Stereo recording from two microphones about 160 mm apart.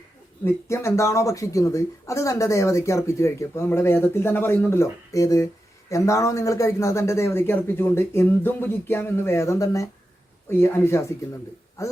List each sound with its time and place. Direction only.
0.4 s speech: 15° left (ahead or behind)